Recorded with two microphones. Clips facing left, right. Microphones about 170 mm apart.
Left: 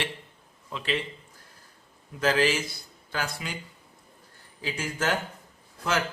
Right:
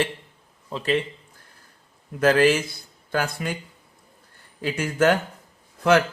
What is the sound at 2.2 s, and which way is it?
Speech, 50° right (ahead or behind).